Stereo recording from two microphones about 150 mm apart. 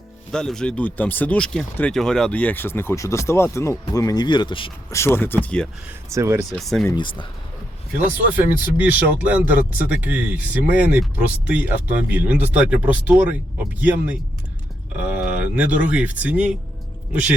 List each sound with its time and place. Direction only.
0.3 s speech: 5° left (ahead or behind); by 4.7 s 35° left (ahead or behind)
4.9 s speech: 15° left (ahead or behind)
6.1 s speech: 20° right (ahead or behind)
6.5 s speech: centre (ahead or behind)
6.9 s speech: 30° left (ahead or behind)
8.3 s speech: 10° right (ahead or behind)